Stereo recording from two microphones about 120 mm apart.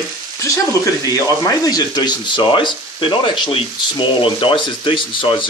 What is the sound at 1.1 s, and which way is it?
Speech, 30° left (ahead or behind).